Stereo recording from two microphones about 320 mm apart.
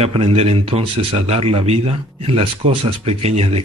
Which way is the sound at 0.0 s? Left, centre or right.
Centre.